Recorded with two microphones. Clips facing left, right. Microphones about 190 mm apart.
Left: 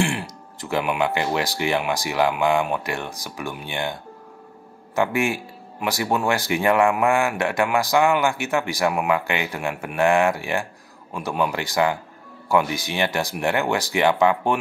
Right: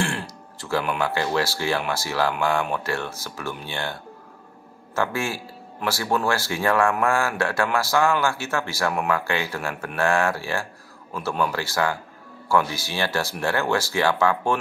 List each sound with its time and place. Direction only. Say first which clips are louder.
0.0 s speech: left 3 dB; 15° left (ahead or behind)